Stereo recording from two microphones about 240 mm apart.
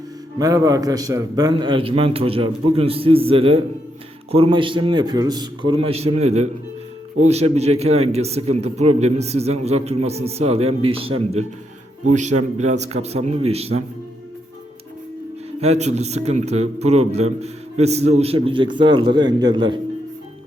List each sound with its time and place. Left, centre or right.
0.3 s a man's voice: centre
15.6 s a man's voice: right